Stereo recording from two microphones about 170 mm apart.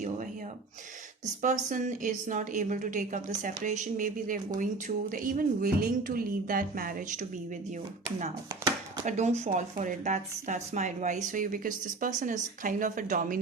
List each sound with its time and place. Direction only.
1.4 s a woman's voice: 50° right (ahead or behind)
8.4 s a sound: 25° right (ahead or behind)
9.0 s a woman's voice: 40° right (ahead or behind)